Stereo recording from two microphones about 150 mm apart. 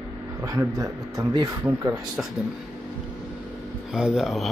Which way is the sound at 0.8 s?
25° right (ahead or behind).